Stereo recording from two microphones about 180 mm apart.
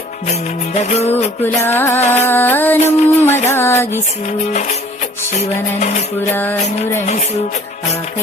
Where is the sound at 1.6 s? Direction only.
15° left (ahead or behind).